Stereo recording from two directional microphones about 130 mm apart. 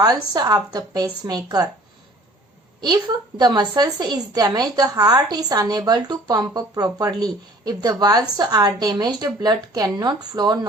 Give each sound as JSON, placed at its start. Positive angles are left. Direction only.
{"t": 0.0, "sound": "a woman's voice", "side_deg": -30}
{"t": 2.8, "sound": "speech", "side_deg": -35}